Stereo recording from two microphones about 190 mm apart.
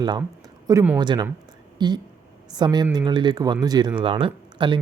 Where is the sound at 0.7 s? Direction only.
15° right (ahead or behind).